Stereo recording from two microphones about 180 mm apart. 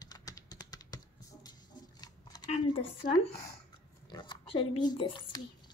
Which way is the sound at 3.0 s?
55° left (ahead or behind).